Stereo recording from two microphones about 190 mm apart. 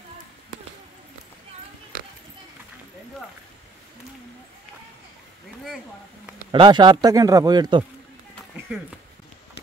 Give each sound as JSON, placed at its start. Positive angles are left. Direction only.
{"t": 6.5, "sound": "speech", "side_deg": -25}